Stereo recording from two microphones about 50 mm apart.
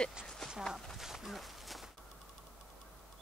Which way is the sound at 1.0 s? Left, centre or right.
Centre.